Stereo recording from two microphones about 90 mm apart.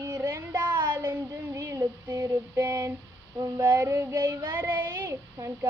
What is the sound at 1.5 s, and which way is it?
Female singing, 40° right (ahead or behind).